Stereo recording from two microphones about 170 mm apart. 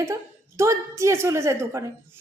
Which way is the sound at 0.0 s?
15° right (ahead or behind).